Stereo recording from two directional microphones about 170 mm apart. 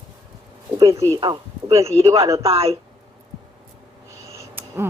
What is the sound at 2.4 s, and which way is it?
Speech, 35° right (ahead or behind).